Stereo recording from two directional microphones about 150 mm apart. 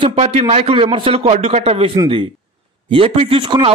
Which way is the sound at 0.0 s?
45° right (ahead or behind).